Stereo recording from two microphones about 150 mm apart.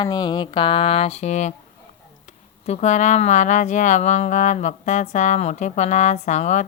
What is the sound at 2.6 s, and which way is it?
Speech, 50° left (ahead or behind).